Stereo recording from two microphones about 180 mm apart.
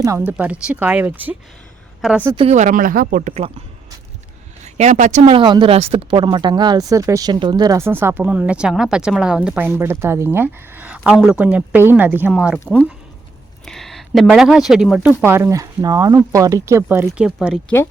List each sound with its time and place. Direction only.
0.0 s a woman's voice: 15° right (ahead or behind)
2.3 s speech: 35° right (ahead or behind)
4.6 s a woman's voice: 40° right (ahead or behind); by 12.5 s 5° right (ahead or behind)
12.6 s a woman's voice: 5° left (ahead or behind)